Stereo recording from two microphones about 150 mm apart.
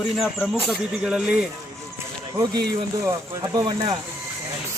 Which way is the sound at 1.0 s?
5° right (ahead or behind).